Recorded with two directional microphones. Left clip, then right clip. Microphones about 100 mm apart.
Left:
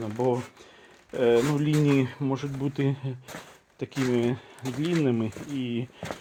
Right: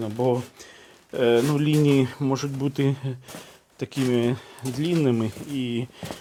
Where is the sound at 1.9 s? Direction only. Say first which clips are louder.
Right 4 dB; 45° right (ahead or behind).